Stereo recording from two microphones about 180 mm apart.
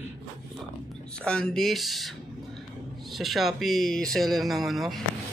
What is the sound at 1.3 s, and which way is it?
Speech, 5° left (ahead or behind).